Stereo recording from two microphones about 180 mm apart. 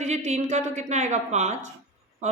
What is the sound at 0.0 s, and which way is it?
A woman's voice, 40° right (ahead or behind).